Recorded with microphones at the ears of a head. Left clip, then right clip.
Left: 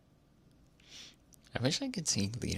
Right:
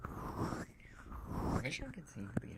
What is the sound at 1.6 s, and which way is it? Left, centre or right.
Speech, left.